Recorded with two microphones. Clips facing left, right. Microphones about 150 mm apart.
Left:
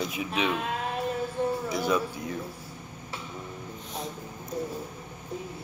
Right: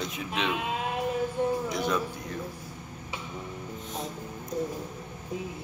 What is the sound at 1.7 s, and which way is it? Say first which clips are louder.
Music: left 2 dB; 5° left (ahead or behind).